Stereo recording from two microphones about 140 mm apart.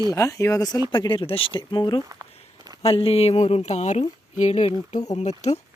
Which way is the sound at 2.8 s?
45° left (ahead or behind).